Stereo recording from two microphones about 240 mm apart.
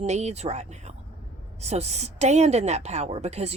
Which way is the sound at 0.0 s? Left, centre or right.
Right.